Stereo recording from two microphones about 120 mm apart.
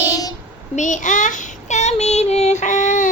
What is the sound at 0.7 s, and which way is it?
Child singing, 90° left.